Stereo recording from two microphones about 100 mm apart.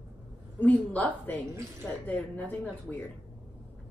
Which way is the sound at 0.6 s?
15° left (ahead or behind).